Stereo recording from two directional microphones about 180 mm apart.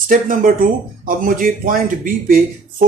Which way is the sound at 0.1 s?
50° right (ahead or behind).